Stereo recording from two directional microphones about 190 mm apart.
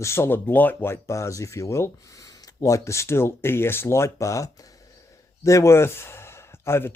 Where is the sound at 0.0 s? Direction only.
15° left (ahead or behind).